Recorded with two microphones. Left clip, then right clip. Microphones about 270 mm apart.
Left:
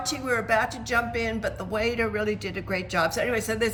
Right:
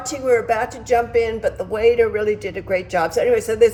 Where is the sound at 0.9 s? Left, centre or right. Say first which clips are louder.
Right 9 dB; centre.